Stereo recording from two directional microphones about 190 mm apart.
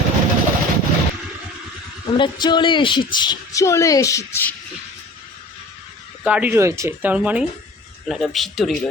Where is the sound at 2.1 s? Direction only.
25° left (ahead or behind).